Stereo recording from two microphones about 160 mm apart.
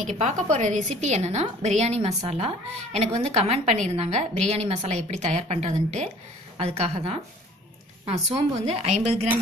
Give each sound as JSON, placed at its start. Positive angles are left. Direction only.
{"t": 0.1, "sound": "a woman's voice", "side_deg": -45}